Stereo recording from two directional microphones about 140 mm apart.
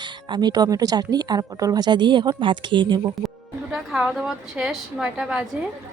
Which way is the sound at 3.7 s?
Centre (ahead or behind).